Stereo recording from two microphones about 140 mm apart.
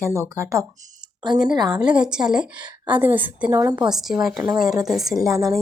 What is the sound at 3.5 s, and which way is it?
Speech, 25° right (ahead or behind).